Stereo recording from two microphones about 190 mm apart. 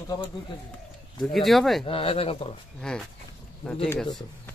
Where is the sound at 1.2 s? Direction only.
Centre (ahead or behind).